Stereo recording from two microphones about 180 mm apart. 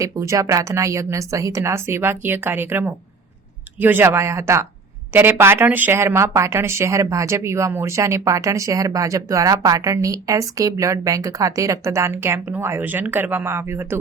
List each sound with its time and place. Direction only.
0.0 s speech: 15° right (ahead or behind)